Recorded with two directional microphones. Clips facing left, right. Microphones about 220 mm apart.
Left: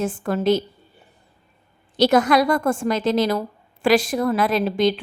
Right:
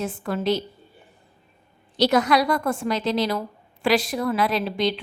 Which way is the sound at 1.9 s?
50° left (ahead or behind).